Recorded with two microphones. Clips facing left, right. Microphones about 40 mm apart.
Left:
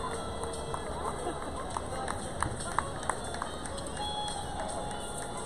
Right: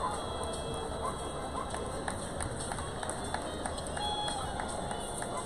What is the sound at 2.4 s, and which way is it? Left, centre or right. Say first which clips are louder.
Run: left 5 dB; left.